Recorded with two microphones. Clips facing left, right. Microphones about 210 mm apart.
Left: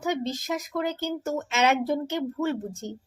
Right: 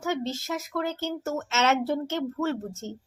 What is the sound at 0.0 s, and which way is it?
Speech, 15° left (ahead or behind).